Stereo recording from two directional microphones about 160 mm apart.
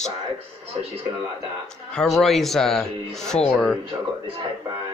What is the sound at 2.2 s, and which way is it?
Speech, centre (ahead or behind).